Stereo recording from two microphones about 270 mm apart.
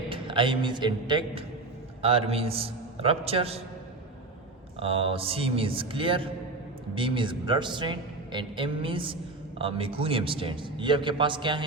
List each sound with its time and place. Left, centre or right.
0.1 s a man's voice: centre
4.8 s a man's voice: right